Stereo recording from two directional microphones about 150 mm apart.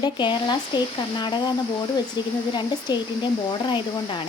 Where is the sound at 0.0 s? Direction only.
30° left (ahead or behind).